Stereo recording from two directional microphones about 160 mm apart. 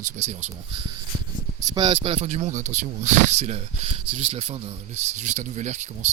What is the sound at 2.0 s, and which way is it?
Speech, 40° right (ahead or behind).